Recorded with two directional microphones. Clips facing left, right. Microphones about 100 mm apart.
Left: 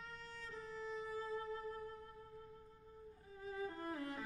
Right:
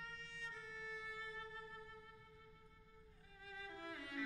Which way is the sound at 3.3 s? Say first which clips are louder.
Left 9 dB; 40° left (ahead or behind).